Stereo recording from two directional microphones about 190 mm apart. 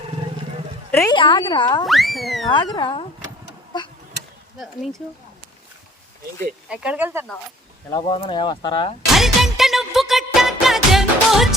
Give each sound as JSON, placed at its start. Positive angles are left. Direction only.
{"t": 0.9, "sound": "a sound", "side_deg": 15}
{"t": 1.1, "sound": "speech", "side_deg": 25}
{"t": 1.9, "sound": "a sound", "side_deg": 0}
{"t": 2.5, "sound": "speech", "side_deg": 25}
{"t": 3.7, "sound": "insect", "side_deg": 20}
{"t": 4.5, "sound": "a sound", "side_deg": 0}
{"t": 6.7, "sound": "speech", "side_deg": -5}
{"t": 7.9, "sound": "speech", "side_deg": 25}
{"t": 9.0, "sound": "music", "side_deg": 0}